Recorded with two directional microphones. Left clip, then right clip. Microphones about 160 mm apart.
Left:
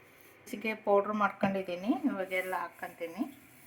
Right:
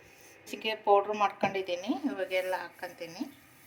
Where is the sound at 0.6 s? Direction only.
70° left (ahead or behind).